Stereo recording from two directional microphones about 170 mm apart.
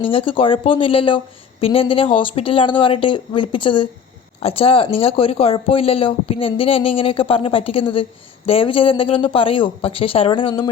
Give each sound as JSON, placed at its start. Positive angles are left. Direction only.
{"t": 0.0, "sound": "speech", "side_deg": 30}